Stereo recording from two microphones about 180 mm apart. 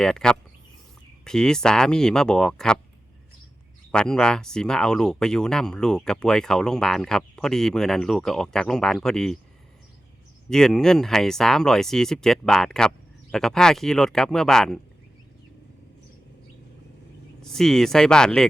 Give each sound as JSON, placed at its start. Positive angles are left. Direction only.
{"t": 0.0, "sound": "speech", "side_deg": 5}
{"t": 3.9, "sound": "speech", "side_deg": 5}
{"t": 10.5, "sound": "speech", "side_deg": 5}
{"t": 17.4, "sound": "speech", "side_deg": 0}